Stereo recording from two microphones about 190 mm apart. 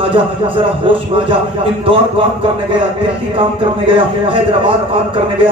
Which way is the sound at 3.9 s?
25° right (ahead or behind).